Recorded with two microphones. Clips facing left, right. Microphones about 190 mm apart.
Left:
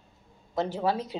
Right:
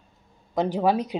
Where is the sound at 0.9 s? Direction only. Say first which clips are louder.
Right 6 dB; 15° right (ahead or behind).